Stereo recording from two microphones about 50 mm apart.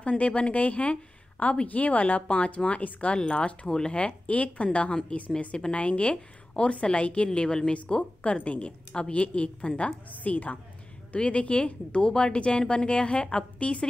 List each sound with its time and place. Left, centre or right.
0.0 s speech: left
7.2 s a woman's voice: centre